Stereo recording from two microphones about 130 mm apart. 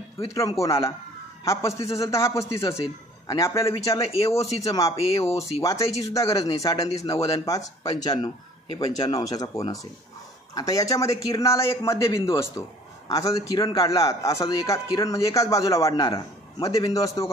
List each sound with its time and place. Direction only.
0.3 s speech: 25° left (ahead or behind)
10.5 s speech: 25° left (ahead or behind)